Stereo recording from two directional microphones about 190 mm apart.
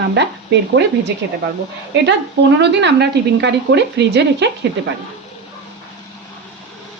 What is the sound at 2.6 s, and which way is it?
Speech, 65° right (ahead or behind).